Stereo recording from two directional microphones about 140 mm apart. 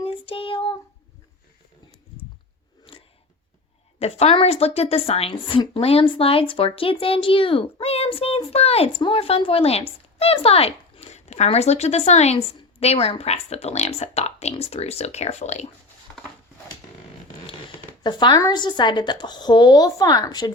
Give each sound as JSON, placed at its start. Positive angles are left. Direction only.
{"t": 0.0, "sound": "child singing", "side_deg": 40}
{"t": 2.9, "sound": "a sound", "side_deg": 40}
{"t": 4.0, "sound": "a woman's voice", "side_deg": 45}
{"t": 18.0, "sound": "a woman's voice", "side_deg": 30}